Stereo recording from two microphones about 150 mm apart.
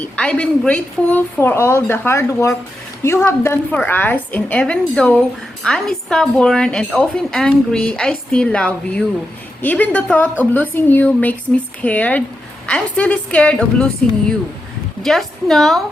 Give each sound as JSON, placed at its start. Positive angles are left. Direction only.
{"t": 0.0, "sound": "a woman's voice", "side_deg": 10}